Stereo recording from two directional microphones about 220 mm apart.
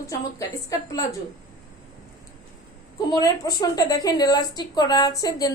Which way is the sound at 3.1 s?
20° left (ahead or behind).